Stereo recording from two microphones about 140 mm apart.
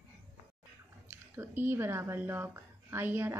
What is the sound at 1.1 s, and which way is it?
A woman's voice, 15° right (ahead or behind).